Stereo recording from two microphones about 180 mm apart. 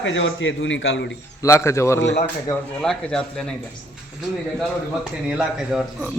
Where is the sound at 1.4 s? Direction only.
15° left (ahead or behind).